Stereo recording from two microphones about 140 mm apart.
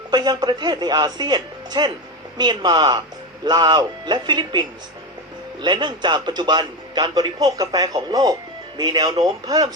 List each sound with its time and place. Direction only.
0.1 s a man's voice: 30° right (ahead or behind)
5.6 s a man's voice: 35° right (ahead or behind)